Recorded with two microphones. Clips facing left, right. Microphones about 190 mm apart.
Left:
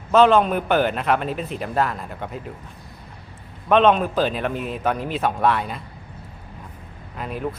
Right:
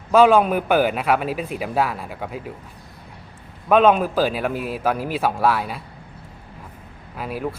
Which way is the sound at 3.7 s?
5° right (ahead or behind).